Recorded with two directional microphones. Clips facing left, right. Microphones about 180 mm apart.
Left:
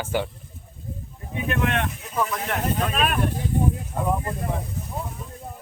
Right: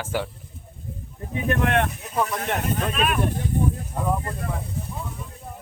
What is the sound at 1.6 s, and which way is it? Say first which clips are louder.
Speech: right 3 dB; 50° right (ahead or behind).